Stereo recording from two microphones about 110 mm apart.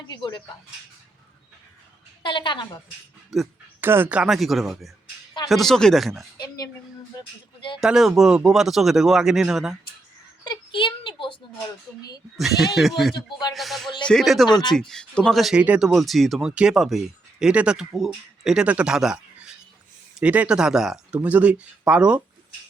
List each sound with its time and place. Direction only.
0.2 s a woman's voice: 45° left (ahead or behind)
2.2 s a woman's voice: 45° left (ahead or behind)
3.3 s speech: centre (ahead or behind)
3.8 s speech: 20° right (ahead or behind)
4.3 s speech: centre (ahead or behind)
6.3 s a sound: 35° left (ahead or behind)
7.1 s speech: 35° left (ahead or behind)
7.8 s speech: 5° right (ahead or behind)
10.4 s a child's voice: 45° left (ahead or behind)
12.4 s speech: centre (ahead or behind)